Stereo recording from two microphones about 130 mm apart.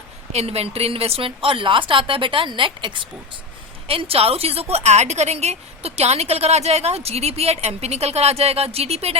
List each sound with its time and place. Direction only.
0.3 s a woman's voice: 50° right (ahead or behind)